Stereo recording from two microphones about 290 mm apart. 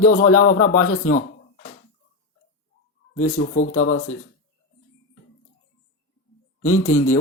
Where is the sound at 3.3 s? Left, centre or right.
Left.